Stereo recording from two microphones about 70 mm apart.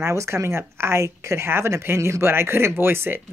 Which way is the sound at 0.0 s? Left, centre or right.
Right.